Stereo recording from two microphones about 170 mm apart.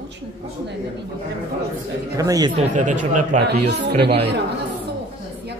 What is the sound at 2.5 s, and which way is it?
Speech, 45° right (ahead or behind).